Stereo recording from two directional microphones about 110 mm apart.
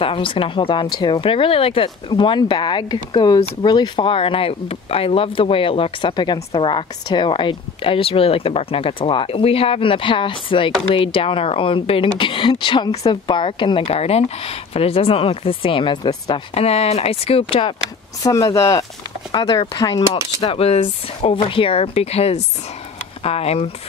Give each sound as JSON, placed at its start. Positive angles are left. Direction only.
{"t": 0.0, "sound": "a woman's voice", "side_deg": 55}
{"t": 18.5, "sound": "speech", "side_deg": 30}
{"t": 20.5, "sound": "a woman's voice", "side_deg": 65}